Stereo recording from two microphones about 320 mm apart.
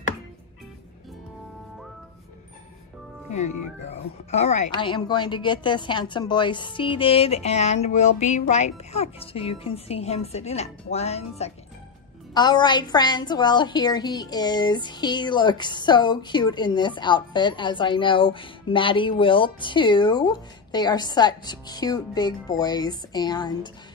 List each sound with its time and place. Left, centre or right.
3.3 s a woman's voice: left